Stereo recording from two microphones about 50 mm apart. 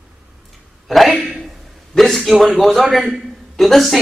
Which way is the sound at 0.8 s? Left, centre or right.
Centre.